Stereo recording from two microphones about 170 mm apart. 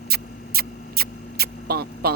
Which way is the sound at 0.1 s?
65° right (ahead or behind).